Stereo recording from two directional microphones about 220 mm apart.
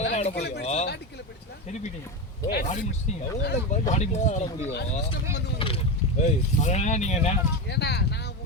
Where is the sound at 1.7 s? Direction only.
30° left (ahead or behind).